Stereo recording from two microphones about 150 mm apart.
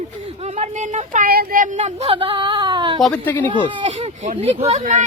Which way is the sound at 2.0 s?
40° right (ahead or behind).